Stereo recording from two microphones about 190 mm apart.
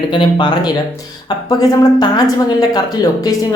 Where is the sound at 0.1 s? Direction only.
25° left (ahead or behind).